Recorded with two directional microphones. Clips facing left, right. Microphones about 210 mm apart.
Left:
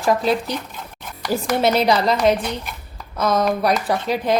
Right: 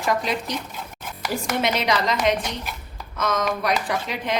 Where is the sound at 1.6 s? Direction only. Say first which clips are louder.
Left 7 dB; 35° left (ahead or behind).